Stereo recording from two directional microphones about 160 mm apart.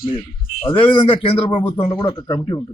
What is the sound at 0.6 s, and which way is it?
Speech, 35° left (ahead or behind).